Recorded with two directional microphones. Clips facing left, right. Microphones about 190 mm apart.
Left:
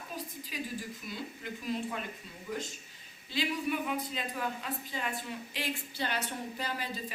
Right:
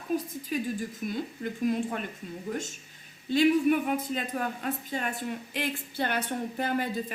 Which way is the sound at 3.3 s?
50° right (ahead or behind).